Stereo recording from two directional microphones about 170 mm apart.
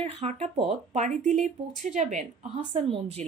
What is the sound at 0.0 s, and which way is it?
Speech, 40° right (ahead or behind).